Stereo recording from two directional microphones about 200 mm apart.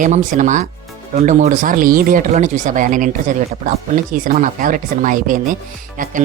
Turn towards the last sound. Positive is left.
turn(degrees=-40)  # may be behind; listen again after turning